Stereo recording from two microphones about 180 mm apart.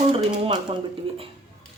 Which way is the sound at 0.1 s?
30° right (ahead or behind).